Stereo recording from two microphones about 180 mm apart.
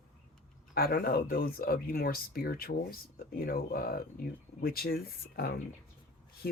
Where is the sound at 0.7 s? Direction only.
60° left (ahead or behind).